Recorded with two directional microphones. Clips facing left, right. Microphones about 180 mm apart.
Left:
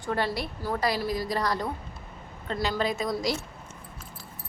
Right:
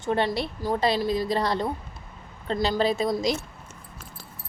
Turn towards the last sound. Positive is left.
turn(degrees=-25)  # may be behind; listen again after turning